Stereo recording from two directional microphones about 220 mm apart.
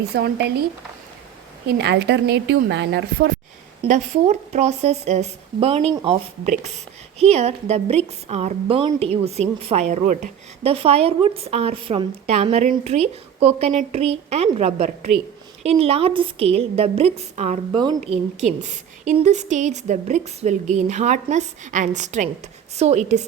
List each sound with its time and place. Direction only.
0.1 s a woman's voice: 45° right (ahead or behind)
1.6 s a woman's voice: 50° right (ahead or behind)
3.8 s a woman's voice: 30° right (ahead or behind)
6.4 s a woman's voice: 35° right (ahead or behind)
17.7 s a woman's voice: 20° right (ahead or behind)